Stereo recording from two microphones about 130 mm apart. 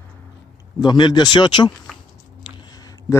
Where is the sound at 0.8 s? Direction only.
35° left (ahead or behind).